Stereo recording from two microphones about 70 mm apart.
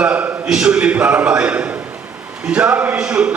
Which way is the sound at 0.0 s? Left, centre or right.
Centre.